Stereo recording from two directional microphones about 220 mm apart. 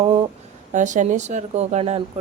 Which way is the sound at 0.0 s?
25° right (ahead or behind).